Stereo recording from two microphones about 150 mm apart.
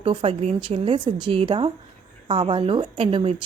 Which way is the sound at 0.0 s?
35° right (ahead or behind).